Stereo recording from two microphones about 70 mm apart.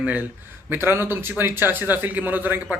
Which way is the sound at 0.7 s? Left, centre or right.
Right.